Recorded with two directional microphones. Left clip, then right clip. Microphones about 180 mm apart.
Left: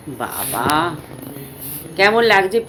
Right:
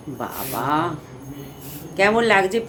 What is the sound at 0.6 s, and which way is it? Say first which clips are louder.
Speech: left 4 dB; 5° right (ahead or behind).